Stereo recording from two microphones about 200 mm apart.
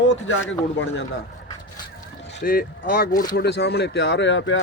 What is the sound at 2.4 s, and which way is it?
Speech, 45° left (ahead or behind).